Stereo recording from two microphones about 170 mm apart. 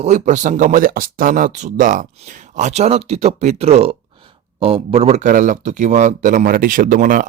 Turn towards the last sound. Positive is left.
turn(degrees=-50)  # may be behind; listen again after turning